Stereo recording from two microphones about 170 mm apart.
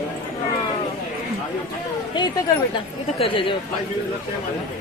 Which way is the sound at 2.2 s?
25° left (ahead or behind).